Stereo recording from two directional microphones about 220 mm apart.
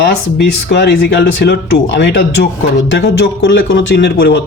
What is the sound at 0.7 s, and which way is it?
A man's voice, 50° left (ahead or behind).